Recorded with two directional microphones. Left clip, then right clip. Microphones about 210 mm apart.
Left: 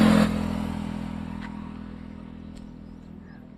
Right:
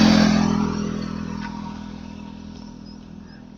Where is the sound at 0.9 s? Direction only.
35° left (ahead or behind).